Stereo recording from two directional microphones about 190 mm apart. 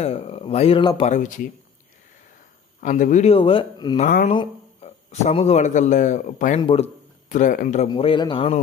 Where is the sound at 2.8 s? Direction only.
40° left (ahead or behind).